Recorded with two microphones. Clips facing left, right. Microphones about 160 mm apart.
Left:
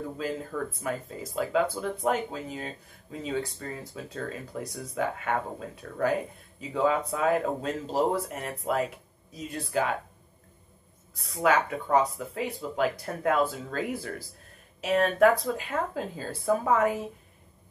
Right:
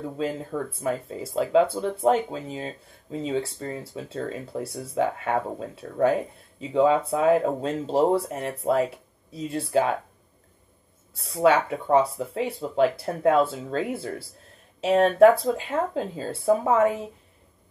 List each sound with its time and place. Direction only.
0.2 s speech: 30° right (ahead or behind)
11.2 s speech: 30° right (ahead or behind)